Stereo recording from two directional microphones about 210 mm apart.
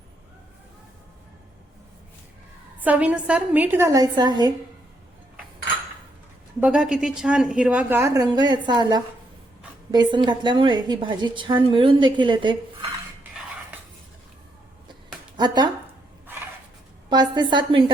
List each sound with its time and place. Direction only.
2.8 s a woman's voice: 5° right (ahead or behind)
6.6 s a woman's voice: 5° right (ahead or behind); by 12.5 s 20° right (ahead or behind)
15.4 s a woman's voice: 20° right (ahead or behind)
17.1 s a woman's voice: 20° right (ahead or behind)